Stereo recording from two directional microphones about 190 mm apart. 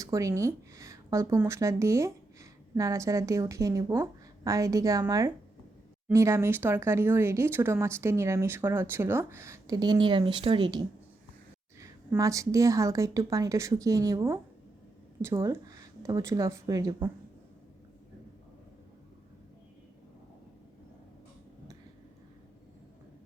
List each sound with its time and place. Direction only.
0.0 s speech: 15° right (ahead or behind)